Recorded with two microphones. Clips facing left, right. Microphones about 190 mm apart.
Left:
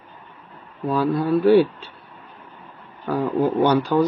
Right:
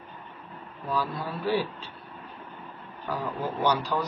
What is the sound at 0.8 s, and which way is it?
Speech, 60° left (ahead or behind).